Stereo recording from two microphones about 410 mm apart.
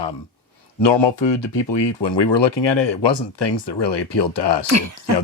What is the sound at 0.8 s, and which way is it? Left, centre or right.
Speech, left.